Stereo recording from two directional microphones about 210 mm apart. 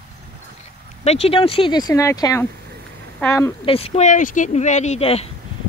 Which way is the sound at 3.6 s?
25° left (ahead or behind).